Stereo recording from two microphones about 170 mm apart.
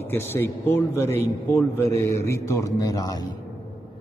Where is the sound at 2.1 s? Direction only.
15° left (ahead or behind).